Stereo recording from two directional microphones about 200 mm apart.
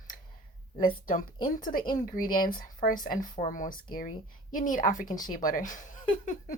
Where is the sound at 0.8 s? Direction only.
45° left (ahead or behind).